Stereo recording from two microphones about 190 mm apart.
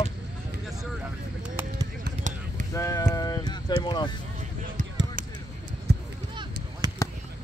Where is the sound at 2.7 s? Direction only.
15° left (ahead or behind).